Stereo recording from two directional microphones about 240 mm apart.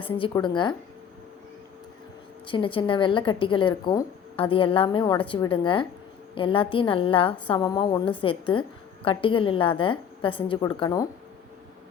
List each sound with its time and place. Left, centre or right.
0.0 s speech: centre
2.5 s speech: left